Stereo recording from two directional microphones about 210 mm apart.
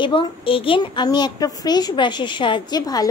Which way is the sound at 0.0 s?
25° left (ahead or behind).